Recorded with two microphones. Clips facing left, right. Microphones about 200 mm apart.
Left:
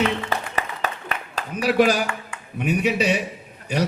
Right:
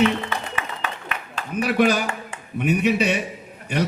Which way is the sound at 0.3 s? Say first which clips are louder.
Left 2 dB; 40° left (ahead or behind).